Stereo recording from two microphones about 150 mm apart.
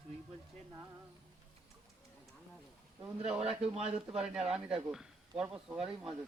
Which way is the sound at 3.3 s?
40° right (ahead or behind).